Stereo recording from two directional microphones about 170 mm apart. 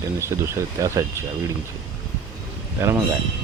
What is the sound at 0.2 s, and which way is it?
Speech, 15° right (ahead or behind).